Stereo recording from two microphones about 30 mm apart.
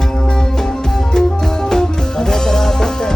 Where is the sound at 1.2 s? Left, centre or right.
Left.